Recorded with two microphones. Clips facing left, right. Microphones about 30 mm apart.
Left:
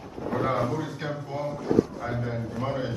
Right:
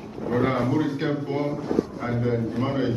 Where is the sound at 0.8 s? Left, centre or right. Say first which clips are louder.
Right 8 dB; right.